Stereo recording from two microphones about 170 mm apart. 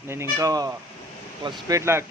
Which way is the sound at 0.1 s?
15° right (ahead or behind).